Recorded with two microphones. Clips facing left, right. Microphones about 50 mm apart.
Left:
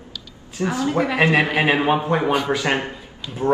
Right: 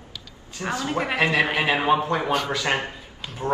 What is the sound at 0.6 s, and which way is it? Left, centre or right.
Speech, centre.